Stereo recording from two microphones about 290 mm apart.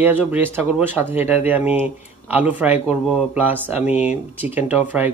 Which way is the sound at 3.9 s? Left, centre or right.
Left.